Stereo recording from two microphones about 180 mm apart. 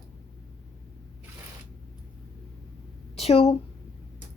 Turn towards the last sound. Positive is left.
turn(degrees=35)  # may be behind; listen again after turning